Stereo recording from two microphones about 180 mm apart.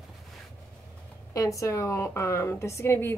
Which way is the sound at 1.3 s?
20° left (ahead or behind).